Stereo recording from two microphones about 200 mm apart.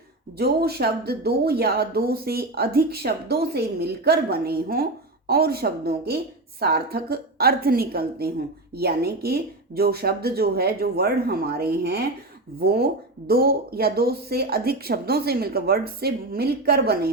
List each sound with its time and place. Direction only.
0.3 s speech: 50° right (ahead or behind)